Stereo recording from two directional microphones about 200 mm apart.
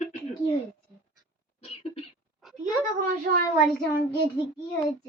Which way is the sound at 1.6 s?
30° left (ahead or behind).